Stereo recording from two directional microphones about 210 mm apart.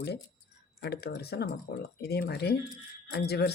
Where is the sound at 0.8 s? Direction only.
50° left (ahead or behind).